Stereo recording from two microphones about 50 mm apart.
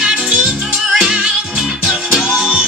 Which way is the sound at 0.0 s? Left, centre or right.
Centre.